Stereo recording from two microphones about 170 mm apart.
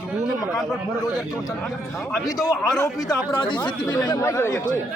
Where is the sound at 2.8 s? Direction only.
20° left (ahead or behind).